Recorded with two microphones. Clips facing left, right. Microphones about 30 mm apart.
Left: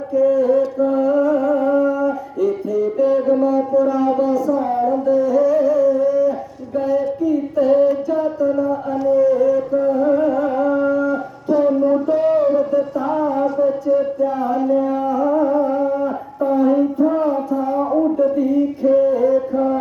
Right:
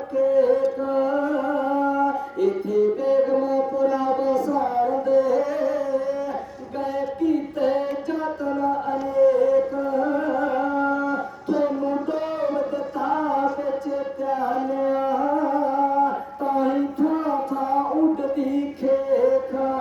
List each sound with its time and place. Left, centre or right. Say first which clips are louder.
0.3 s mantra: left 3 dB; right
0.8 s music: left 6 dB; right
3.4 s a sound: left 5 dB; right
5.0 s carnatic music: left 6 dB; right
6.7 s child singing: left 7 dB; right
7.7 s music: left 9 dB; right
9.2 s a sound: right 1 dB; right
15.1 s music: left 5 dB; right
15.4 s music: left 4 dB; centre
16.4 s a sound: left 7 dB; right
18.2 s music: left 7 dB; right
19.5 s music: left 6 dB; centre